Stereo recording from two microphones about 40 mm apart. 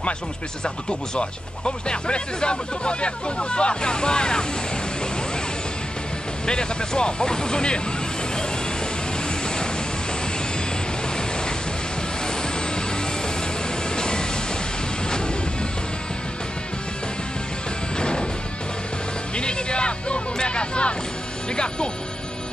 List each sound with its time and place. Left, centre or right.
0.8 s speech: left
6.4 s speech: centre
13.9 s train: centre
15.0 s music: centre
17.9 s music: left
19.3 s hubbub: left